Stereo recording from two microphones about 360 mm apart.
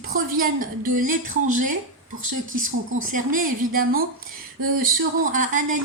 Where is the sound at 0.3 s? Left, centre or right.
Right.